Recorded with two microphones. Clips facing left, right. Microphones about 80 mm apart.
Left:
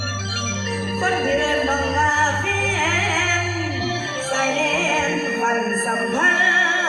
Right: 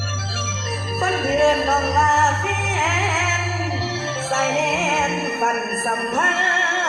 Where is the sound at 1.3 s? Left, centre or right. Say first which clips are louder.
Right 3 dB; left.